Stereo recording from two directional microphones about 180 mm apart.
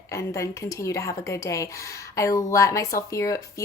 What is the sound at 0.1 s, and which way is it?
Speech, 15° left (ahead or behind).